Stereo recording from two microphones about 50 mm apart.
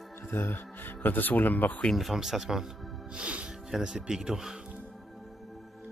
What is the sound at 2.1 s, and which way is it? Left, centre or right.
Speech, centre.